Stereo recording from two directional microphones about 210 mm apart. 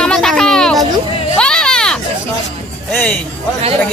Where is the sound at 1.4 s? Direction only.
5° left (ahead or behind).